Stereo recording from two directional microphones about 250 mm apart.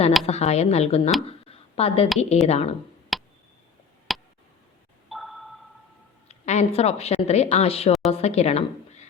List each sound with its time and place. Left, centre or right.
0.3 s speech: left
1.5 s a sound: left
2.3 s speech: left
3.1 s tick: centre
5.0 s a sound: centre
6.2 s speech: left